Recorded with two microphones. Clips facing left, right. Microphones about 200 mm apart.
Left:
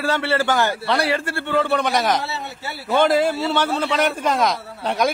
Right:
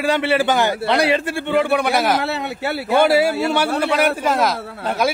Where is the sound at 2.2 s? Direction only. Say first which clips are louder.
Right 7 dB; 60° right (ahead or behind).